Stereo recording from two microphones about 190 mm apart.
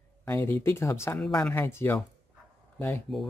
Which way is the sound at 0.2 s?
10° left (ahead or behind).